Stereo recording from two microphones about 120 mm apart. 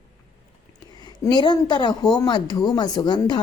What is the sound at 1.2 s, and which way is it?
Speech, 35° left (ahead or behind).